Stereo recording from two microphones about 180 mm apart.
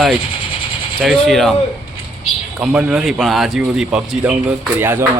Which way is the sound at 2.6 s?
5° right (ahead or behind).